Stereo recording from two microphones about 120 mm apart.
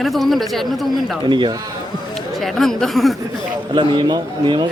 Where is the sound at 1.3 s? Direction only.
40° right (ahead or behind).